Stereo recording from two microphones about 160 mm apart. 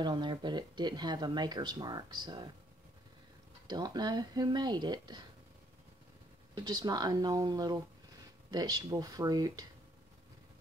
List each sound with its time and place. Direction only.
0.0 s speech: 30° right (ahead or behind)
3.6 s speech: 25° right (ahead or behind)
6.5 s speech: 25° right (ahead or behind)